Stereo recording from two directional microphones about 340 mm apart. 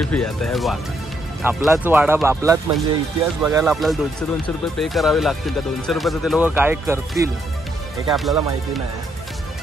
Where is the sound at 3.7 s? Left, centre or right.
Centre.